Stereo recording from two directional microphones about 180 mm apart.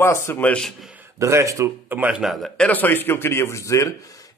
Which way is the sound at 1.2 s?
15° right (ahead or behind).